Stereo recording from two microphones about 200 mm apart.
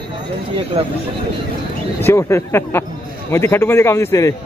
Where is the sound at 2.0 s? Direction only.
15° left (ahead or behind).